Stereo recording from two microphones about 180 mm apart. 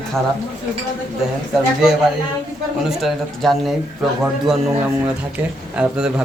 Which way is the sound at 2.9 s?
Centre (ahead or behind).